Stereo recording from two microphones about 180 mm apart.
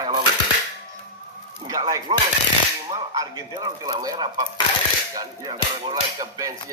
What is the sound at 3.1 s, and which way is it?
Speech, 20° right (ahead or behind).